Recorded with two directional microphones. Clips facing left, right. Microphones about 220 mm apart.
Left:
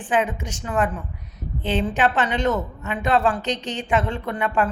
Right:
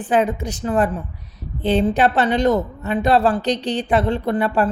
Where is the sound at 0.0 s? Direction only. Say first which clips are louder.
Right 4 dB; 35° right (ahead or behind).